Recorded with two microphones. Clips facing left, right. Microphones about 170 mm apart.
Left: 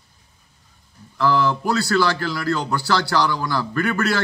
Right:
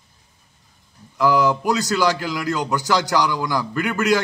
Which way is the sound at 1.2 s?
15° right (ahead or behind).